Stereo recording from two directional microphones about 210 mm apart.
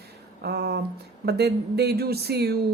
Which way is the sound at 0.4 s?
50° right (ahead or behind).